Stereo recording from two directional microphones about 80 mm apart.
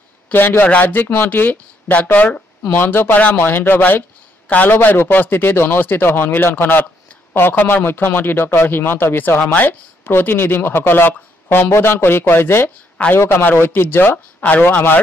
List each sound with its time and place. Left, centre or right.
0.3 s a man's voice: left
9.4 s speech: centre
9.7 s a man's voice: left